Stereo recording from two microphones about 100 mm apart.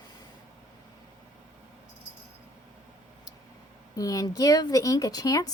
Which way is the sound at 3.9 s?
35° left (ahead or behind).